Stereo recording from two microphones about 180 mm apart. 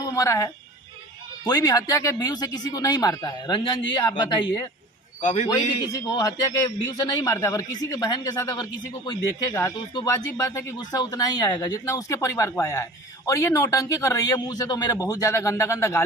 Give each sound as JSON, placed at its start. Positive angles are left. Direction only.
{"t": 0.0, "sound": "a man's voice", "side_deg": 15}
{"t": 5.2, "sound": "a man's voice", "side_deg": 45}
{"t": 5.5, "sound": "a man's voice", "side_deg": 20}